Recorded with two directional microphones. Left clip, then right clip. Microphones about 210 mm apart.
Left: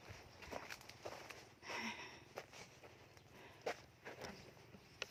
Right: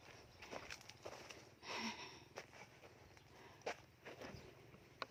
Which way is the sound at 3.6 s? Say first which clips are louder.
Left 2 dB; 45° left (ahead or behind).